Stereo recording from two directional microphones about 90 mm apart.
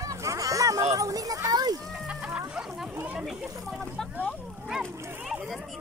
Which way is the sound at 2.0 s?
15° right (ahead or behind).